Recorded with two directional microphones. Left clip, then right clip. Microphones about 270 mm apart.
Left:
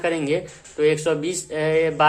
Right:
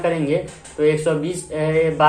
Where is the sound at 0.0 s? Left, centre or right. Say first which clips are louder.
Right 2 dB; left.